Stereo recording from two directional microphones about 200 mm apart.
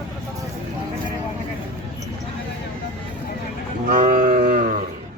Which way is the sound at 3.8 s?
40° right (ahead or behind).